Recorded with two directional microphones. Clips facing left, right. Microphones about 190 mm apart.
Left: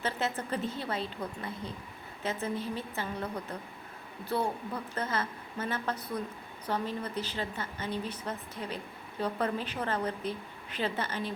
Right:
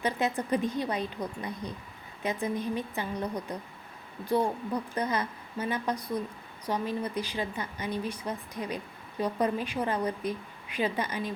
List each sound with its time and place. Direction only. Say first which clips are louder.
0.0 s a woman's voice: right 4 dB; 15° right (ahead or behind)